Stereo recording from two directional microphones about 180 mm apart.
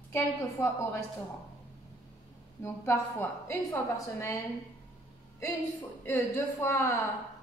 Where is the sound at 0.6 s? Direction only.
15° left (ahead or behind).